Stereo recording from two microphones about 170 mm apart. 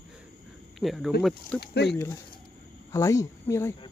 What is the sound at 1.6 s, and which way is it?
Speech, 75° left (ahead or behind).